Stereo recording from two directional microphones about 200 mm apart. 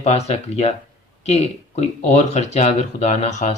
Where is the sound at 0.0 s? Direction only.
30° left (ahead or behind).